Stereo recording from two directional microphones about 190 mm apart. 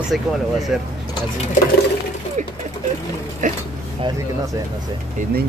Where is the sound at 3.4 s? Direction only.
40° right (ahead or behind).